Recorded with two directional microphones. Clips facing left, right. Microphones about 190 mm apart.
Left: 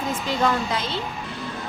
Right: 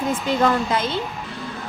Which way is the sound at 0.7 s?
50° right (ahead or behind).